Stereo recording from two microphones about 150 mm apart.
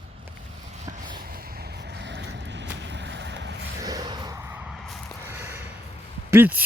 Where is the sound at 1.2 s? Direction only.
80° right.